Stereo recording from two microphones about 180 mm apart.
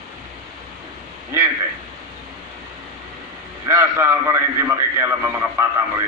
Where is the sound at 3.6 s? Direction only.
15° right (ahead or behind).